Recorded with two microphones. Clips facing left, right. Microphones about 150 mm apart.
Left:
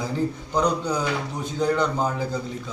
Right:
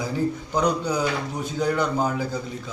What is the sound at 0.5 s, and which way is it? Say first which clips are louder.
A man's voice: left 1 dB; 5° right (ahead or behind).